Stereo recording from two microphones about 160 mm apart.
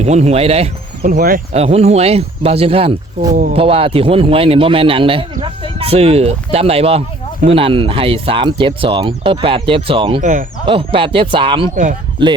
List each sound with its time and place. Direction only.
0.0 s a man's voice: 45° right (ahead or behind)
1.0 s speech: 60° right (ahead or behind)
1.5 s a man's voice: 40° right (ahead or behind)